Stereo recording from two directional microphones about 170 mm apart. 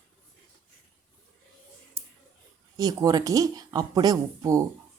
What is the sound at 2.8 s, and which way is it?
Speech, 20° right (ahead or behind).